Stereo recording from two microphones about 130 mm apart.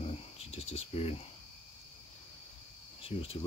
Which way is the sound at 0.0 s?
55° left (ahead or behind).